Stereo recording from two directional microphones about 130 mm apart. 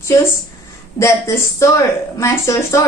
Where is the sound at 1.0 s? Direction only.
20° left (ahead or behind).